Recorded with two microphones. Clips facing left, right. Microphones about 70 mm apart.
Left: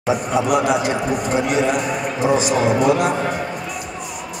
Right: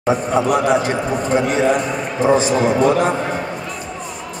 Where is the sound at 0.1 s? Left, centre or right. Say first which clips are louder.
Right 1 dB; right.